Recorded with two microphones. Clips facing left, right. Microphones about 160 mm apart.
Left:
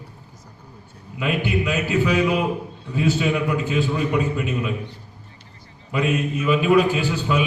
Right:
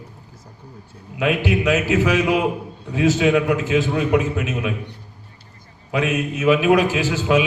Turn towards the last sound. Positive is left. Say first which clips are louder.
# right 3 dB
turn(degrees=-90)